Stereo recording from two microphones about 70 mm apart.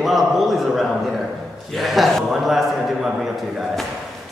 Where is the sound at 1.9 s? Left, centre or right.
Centre.